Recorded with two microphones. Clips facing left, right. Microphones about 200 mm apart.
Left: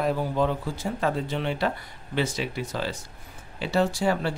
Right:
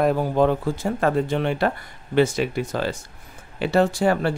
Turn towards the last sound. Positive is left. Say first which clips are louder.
# right 5 dB
turn(degrees=-55)  # may be behind; listen again after turning